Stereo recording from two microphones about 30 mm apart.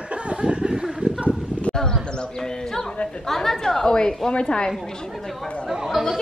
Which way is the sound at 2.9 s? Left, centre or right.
Left.